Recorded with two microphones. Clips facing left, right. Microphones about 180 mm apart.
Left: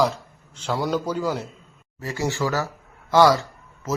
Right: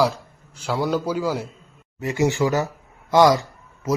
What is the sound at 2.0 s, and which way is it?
Speech, 20° right (ahead or behind).